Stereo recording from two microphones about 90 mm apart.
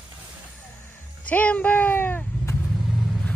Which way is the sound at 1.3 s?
15° left (ahead or behind).